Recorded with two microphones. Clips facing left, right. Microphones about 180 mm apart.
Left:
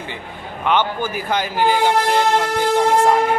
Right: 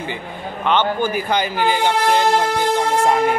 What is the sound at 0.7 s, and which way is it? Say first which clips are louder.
A man's voice: right 1 dB; 5° left (ahead or behind).